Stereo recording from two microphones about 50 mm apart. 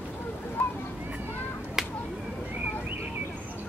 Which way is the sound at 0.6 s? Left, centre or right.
Left.